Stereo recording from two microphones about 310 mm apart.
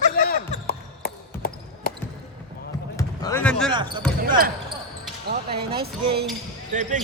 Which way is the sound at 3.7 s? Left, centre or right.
Centre.